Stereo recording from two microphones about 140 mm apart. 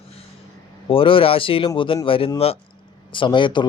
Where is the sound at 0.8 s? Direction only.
40° left (ahead or behind).